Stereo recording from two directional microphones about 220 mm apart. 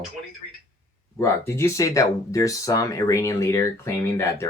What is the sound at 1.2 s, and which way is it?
Speech, 10° left (ahead or behind).